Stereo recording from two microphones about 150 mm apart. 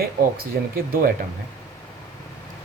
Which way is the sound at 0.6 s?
80° right.